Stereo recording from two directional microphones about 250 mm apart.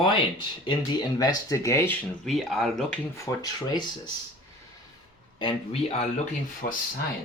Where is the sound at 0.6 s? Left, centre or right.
Centre.